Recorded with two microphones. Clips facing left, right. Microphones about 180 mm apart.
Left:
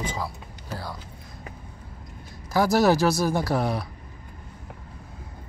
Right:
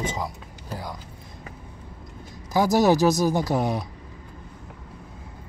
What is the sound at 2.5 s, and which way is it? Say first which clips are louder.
Speech: right 1 dB; 15° right (ahead or behind).